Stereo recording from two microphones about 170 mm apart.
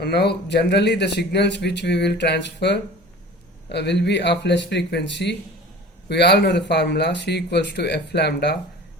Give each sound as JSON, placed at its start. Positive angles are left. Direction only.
{"t": 0.0, "sound": "speech", "side_deg": 75}